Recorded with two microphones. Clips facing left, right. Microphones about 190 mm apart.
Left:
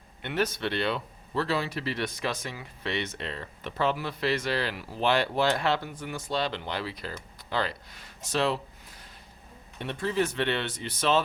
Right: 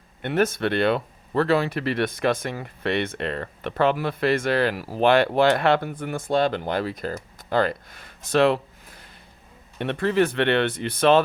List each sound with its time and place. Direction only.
0.2 s speech: 50° right (ahead or behind)
9.7 s speech: 65° right (ahead or behind)